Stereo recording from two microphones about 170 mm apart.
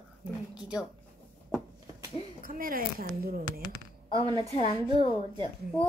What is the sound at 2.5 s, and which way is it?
Speech, 55° right (ahead or behind).